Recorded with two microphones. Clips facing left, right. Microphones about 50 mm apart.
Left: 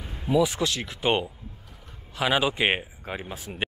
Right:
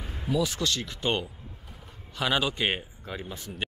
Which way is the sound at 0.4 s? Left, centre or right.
Centre.